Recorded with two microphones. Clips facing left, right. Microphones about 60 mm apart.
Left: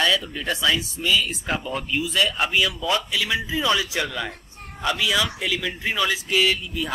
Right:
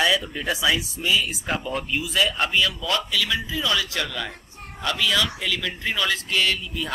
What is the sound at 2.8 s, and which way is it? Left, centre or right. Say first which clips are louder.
A man's voice: left 1 dB; centre.